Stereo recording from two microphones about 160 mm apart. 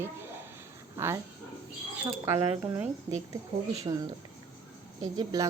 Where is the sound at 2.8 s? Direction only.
20° right (ahead or behind).